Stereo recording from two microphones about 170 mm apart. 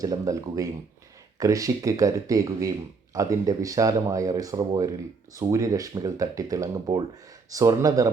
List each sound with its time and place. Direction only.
0.0 s speech: 20° right (ahead or behind)